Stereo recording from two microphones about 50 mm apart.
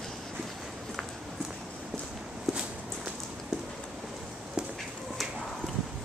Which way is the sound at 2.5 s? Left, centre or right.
Centre.